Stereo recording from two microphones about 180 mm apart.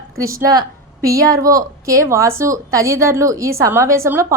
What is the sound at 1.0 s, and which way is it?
A woman's voice, 20° right (ahead or behind).